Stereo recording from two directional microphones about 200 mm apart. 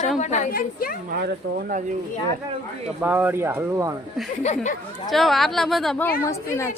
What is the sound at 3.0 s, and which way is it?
Speech, 10° right (ahead or behind).